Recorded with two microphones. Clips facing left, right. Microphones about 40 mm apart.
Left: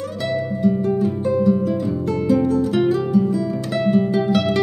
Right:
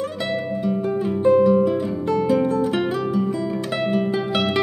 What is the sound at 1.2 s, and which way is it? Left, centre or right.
Music, right.